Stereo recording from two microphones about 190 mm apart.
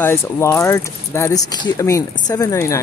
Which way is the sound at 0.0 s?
15° left (ahead or behind).